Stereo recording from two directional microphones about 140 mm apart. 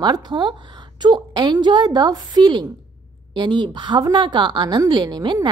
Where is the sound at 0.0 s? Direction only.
30° right (ahead or behind).